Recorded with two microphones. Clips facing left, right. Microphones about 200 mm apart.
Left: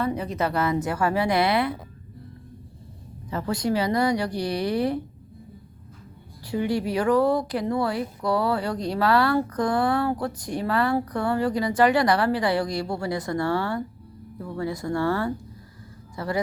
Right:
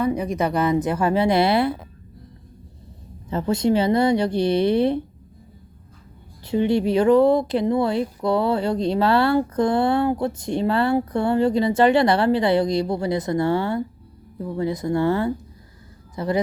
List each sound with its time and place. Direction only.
0.0 s speech: 15° right (ahead or behind)
3.2 s speech: 25° right (ahead or behind)
6.4 s speech: 25° right (ahead or behind)